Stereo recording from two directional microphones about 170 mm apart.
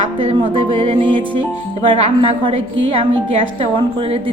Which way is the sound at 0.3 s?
30° right (ahead or behind).